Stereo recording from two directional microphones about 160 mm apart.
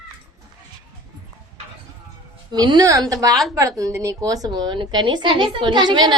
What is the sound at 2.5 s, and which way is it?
A woman's voice, 25° right (ahead or behind).